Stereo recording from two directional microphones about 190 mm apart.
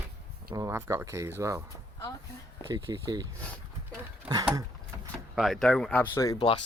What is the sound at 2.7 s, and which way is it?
Speech, 20° right (ahead or behind).